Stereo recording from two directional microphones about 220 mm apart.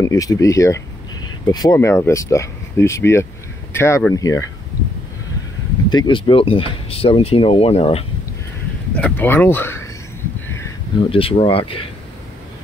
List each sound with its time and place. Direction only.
0.0 s speech: 15° left (ahead or behind)
5.9 s speech: 20° left (ahead or behind)
8.9 s speech: 5° left (ahead or behind)
11.1 s speech: 25° left (ahead or behind)